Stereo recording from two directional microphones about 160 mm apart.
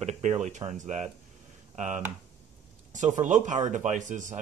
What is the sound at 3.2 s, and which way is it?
Speech, 50° right (ahead or behind).